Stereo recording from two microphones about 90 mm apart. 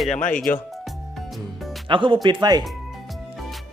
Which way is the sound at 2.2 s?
55° right (ahead or behind).